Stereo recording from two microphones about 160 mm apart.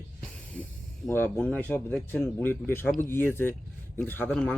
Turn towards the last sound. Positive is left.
turn(degrees=10)  # may be behind; listen again after turning